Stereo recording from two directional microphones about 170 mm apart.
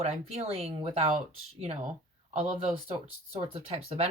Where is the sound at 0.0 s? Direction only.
35° right (ahead or behind).